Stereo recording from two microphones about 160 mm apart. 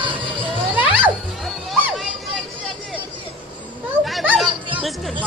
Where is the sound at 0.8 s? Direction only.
10° right (ahead or behind).